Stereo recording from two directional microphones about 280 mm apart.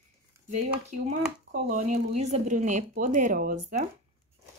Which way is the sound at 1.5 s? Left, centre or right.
Right.